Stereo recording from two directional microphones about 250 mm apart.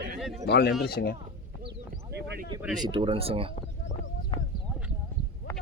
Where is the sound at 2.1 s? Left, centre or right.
Right.